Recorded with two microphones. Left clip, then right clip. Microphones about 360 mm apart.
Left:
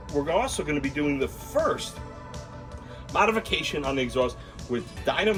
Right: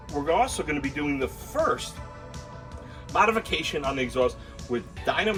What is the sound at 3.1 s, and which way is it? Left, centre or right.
Speech, centre.